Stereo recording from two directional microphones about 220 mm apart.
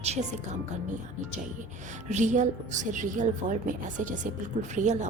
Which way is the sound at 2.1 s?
35° right (ahead or behind).